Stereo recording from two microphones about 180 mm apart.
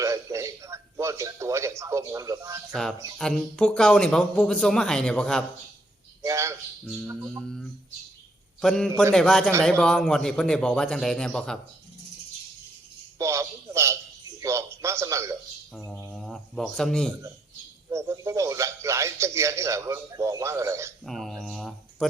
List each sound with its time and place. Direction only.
0.0 s a man's voice: 15° right (ahead or behind)
3.2 s speech: 5° left (ahead or behind)
6.2 s a man's voice: 15° right (ahead or behind)
6.8 s speech: centre (ahead or behind)
13.1 s a sound: 15° right (ahead or behind)
15.9 s speech: 5° left (ahead or behind)
17.8 s a man's voice: 15° right (ahead or behind)
21.0 s speech: centre (ahead or behind)